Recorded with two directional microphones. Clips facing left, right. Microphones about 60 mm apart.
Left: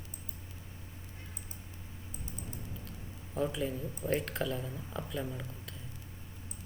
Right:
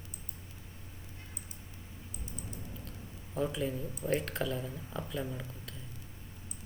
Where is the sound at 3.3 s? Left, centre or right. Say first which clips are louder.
Even; centre.